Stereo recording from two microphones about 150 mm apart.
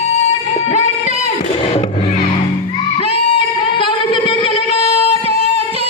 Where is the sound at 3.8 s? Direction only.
35° left (ahead or behind).